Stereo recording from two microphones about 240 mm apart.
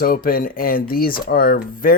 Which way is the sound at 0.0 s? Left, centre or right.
Left.